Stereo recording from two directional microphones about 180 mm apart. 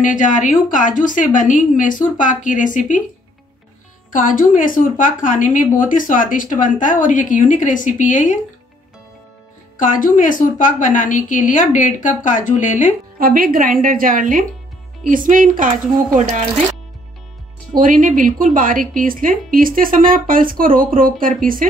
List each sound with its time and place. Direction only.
0.0 s speech: 45° left (ahead or behind)
4.1 s speech: 45° left (ahead or behind)
9.8 s speech: 50° left (ahead or behind)
13.2 s a woman's voice: 50° right (ahead or behind)
17.7 s a woman's voice: 45° right (ahead or behind)